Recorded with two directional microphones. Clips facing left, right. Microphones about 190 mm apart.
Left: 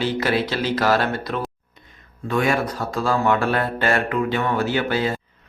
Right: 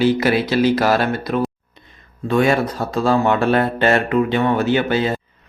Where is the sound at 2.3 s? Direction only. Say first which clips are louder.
Right 5 dB; 25° right (ahead or behind).